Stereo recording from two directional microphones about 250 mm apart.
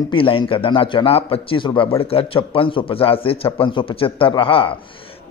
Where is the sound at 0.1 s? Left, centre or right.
Left.